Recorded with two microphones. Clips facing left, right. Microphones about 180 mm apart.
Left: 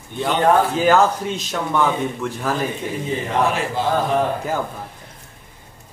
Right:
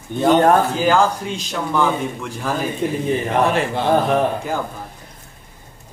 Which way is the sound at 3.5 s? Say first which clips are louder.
Right 3 dB; 65° right (ahead or behind).